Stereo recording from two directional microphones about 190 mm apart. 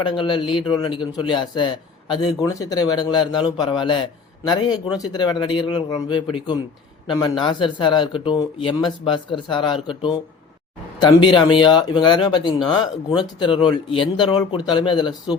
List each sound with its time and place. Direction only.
0.0 s a man's voice: 25° left (ahead or behind)